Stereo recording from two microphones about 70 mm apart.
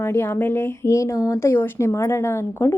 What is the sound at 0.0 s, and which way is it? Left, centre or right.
Speech, left.